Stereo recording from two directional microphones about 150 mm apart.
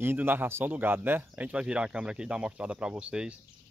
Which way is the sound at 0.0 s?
15° right (ahead or behind).